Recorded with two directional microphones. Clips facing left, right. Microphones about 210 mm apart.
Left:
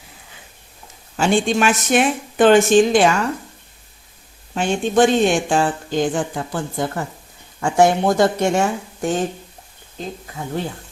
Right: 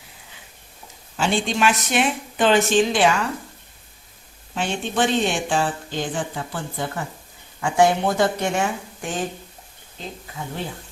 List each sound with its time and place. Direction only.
1.1 s a woman's voice: 50° left (ahead or behind)
4.5 s a woman's voice: 45° left (ahead or behind)